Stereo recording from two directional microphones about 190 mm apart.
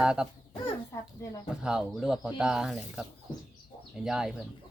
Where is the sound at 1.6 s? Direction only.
5° right (ahead or behind).